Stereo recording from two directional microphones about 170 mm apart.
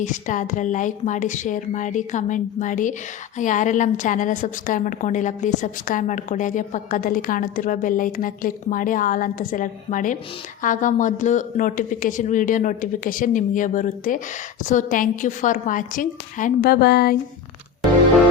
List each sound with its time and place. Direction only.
0.0 s a woman's voice: 45° left (ahead or behind); by 17.2 s 70° left (ahead or behind)